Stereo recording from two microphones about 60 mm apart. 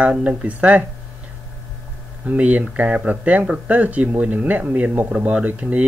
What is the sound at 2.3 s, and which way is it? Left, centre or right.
Speech, right.